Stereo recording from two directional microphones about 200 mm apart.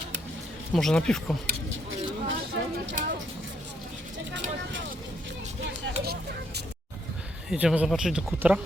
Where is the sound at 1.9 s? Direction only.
70° right (ahead or behind).